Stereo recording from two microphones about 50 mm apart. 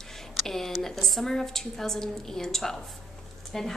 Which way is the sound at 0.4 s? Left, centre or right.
Centre.